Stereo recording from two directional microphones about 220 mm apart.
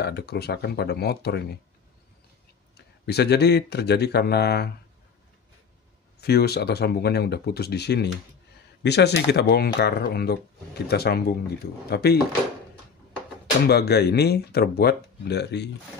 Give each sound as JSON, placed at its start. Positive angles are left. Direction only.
{"t": 0.0, "sound": "speech", "side_deg": 50}
{"t": 3.1, "sound": "speech", "side_deg": 50}
{"t": 6.2, "sound": "speech", "side_deg": 45}
{"t": 13.7, "sound": "speech", "side_deg": 45}